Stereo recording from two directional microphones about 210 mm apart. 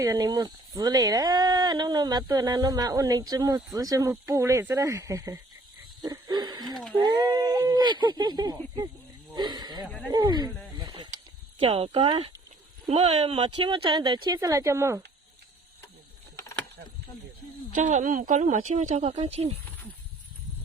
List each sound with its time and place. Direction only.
0.0 s speech: 15° right (ahead or behind)
6.0 s a sound: 20° right (ahead or behind)
6.7 s a sound: centre (ahead or behind)
7.0 s speech: 20° right (ahead or behind)
9.3 s snake: 20° right (ahead or behind)
10.1 s speech: 20° right (ahead or behind)
10.8 s snake: 20° right (ahead or behind)
11.6 s speech: 30° right (ahead or behind)
17.7 s speech: 35° right (ahead or behind)